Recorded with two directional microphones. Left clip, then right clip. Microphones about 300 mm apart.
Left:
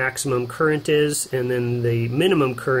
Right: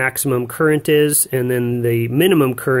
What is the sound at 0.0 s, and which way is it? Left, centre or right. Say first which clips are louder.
Speech: right 4 dB; right.